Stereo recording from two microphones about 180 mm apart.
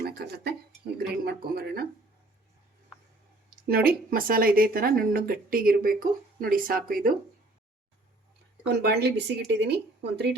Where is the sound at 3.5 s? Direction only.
55° right (ahead or behind).